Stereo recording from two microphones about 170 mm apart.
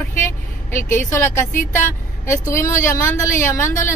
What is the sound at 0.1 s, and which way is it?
Speech, 15° left (ahead or behind).